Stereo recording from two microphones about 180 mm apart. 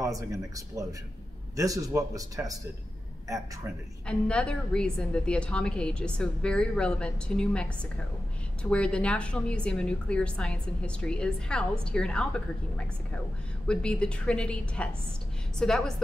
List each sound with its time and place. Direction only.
0.0 s a man's voice: 20° right (ahead or behind)
4.1 s a woman's voice: 5° left (ahead or behind)
8.6 s a woman's voice: 5° left (ahead or behind)
13.7 s a woman's voice: 5° left (ahead or behind)